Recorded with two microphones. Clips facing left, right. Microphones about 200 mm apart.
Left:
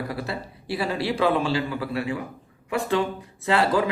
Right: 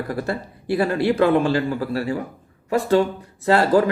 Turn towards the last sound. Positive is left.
turn(degrees=-40)  # may be behind; listen again after turning